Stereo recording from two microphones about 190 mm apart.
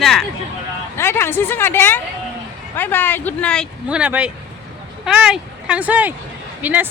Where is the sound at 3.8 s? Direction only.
5° right (ahead or behind).